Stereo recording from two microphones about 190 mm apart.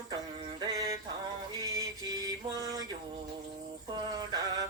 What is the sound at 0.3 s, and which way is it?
Music, 25° right (ahead or behind).